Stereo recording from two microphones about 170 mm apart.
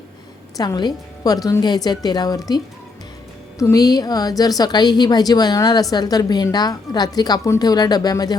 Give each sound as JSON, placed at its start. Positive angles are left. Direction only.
{"t": 0.5, "sound": "a woman's voice", "side_deg": 20}
{"t": 3.6, "sound": "a woman's voice", "side_deg": 20}